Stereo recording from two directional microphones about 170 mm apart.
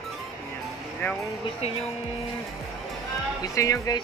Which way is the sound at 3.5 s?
20° left (ahead or behind).